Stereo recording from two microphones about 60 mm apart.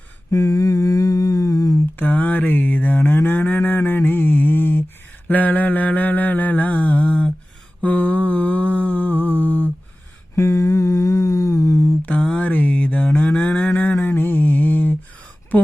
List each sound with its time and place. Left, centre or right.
0.3 s humming: left
2.0 s cattle: left
5.3 s mantra: left
10.3 s humming: left
12.0 s mantra: centre
13.2 s cattle: left
14.0 s mantra: left